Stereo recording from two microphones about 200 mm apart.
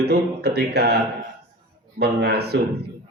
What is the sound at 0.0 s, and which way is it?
Speech, 55° right (ahead or behind).